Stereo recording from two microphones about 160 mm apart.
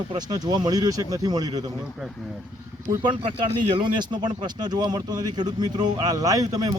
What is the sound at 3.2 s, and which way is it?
Speech, 30° right (ahead or behind).